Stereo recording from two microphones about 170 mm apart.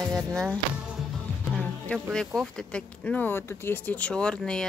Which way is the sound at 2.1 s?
5° left (ahead or behind).